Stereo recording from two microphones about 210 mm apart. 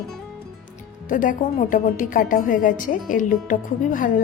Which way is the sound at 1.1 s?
40° left (ahead or behind).